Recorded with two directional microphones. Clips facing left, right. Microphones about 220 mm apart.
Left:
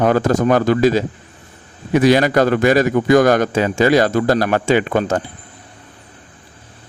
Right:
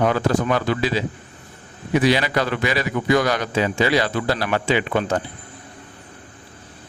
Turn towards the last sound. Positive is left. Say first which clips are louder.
# left 5 dB
turn(degrees=45)  # may be behind; listen again after turning